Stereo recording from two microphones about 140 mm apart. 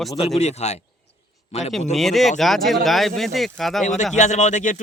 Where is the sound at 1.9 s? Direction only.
Centre (ahead or behind).